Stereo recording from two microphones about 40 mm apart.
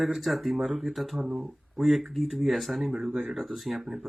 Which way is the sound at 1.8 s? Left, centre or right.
Centre.